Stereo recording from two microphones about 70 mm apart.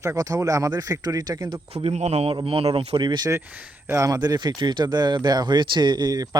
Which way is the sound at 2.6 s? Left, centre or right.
Right.